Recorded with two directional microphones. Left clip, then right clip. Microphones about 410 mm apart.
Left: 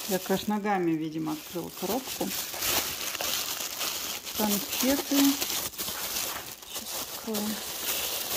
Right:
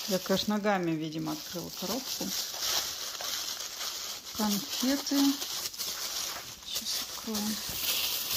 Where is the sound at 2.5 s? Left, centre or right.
Left.